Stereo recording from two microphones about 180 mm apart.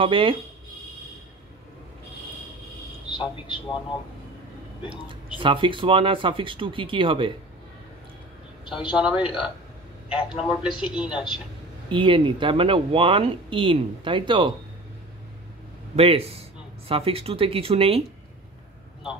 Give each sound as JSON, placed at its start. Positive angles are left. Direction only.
{"t": 0.0, "sound": "speech", "side_deg": -30}
{"t": 3.4, "sound": "a man's voice", "side_deg": 25}
{"t": 4.8, "sound": "speech", "side_deg": -30}
{"t": 8.9, "sound": "a man's voice", "side_deg": -5}
{"t": 11.9, "sound": "speech", "side_deg": -25}
{"t": 16.0, "sound": "speech", "side_deg": -35}